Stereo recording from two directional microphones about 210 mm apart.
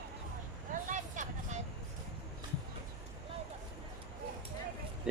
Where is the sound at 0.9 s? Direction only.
35° right (ahead or behind).